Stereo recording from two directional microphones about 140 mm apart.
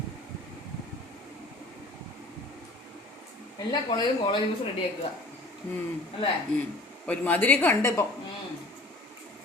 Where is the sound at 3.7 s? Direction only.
30° left (ahead or behind).